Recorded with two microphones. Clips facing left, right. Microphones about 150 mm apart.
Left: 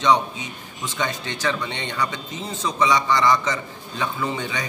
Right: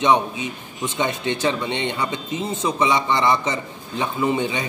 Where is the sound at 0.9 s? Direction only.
20° right (ahead or behind).